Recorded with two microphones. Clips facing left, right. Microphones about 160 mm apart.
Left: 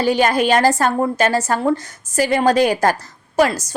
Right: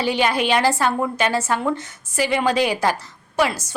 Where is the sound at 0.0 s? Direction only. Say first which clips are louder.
Left 4 dB; 45° left (ahead or behind).